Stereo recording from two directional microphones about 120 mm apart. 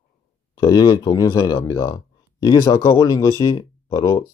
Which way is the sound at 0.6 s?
35° left (ahead or behind).